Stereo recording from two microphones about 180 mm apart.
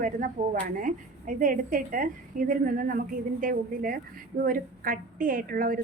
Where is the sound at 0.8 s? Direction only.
50° right (ahead or behind).